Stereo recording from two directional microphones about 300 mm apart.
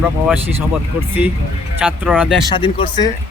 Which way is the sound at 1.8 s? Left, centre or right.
Centre.